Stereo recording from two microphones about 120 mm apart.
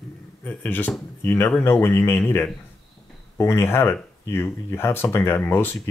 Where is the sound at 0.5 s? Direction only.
15° left (ahead or behind).